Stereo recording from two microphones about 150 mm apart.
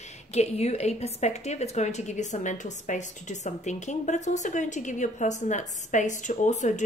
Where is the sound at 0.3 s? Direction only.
45° left (ahead or behind).